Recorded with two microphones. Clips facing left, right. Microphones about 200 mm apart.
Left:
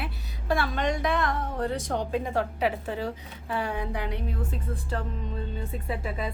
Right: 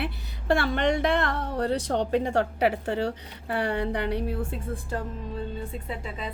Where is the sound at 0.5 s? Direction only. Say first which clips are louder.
Right 3 dB; 65° right (ahead or behind).